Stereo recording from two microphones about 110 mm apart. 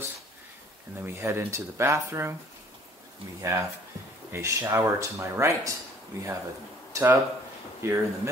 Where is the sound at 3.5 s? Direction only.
25° right (ahead or behind).